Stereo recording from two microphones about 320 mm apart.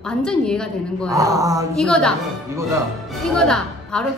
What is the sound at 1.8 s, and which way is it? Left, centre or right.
Speech, centre.